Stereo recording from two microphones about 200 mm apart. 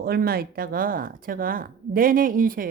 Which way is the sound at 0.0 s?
50° right (ahead or behind).